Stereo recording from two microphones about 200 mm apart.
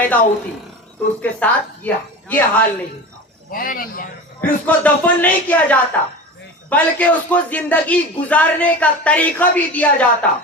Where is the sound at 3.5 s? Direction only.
45° left (ahead or behind).